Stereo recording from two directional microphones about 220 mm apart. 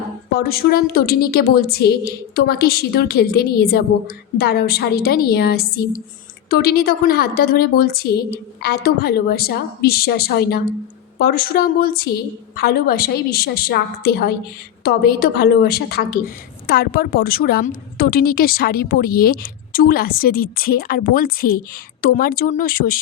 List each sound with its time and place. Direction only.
0.3 s a woman's voice: 45° left (ahead or behind)